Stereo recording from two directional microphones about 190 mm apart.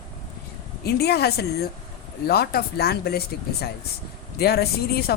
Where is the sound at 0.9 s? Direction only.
55° left (ahead or behind).